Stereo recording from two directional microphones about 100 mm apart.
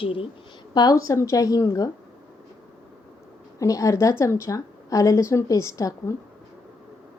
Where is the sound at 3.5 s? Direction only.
35° left (ahead or behind).